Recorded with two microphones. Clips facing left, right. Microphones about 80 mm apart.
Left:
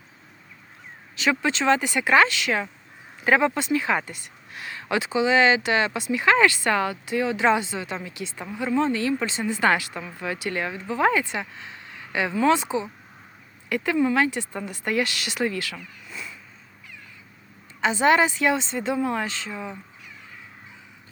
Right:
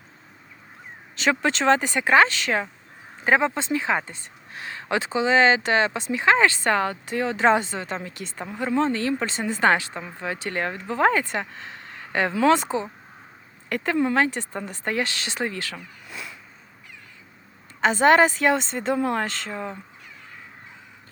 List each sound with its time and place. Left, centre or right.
1.2 s speech: right
12.3 s speech: right
12.5 s speech: right
17.7 s speech: right